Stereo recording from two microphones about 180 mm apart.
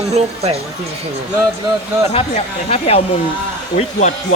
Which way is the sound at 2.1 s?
35° left (ahead or behind).